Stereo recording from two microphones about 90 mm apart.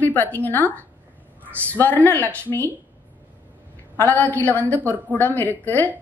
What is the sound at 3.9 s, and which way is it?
A woman's voice, 20° left (ahead or behind).